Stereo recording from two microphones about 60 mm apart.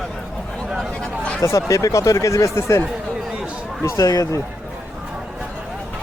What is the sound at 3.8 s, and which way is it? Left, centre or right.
Speech, left.